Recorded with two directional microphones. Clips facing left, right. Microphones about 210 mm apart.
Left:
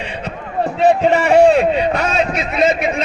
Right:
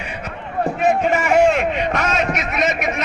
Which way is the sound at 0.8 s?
30° left (ahead or behind).